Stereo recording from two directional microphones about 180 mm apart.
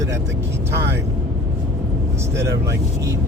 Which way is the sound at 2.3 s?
15° right (ahead or behind).